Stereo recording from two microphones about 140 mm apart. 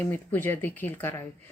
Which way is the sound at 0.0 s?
15° left (ahead or behind).